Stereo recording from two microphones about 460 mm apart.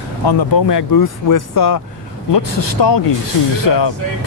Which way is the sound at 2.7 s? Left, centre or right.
Left.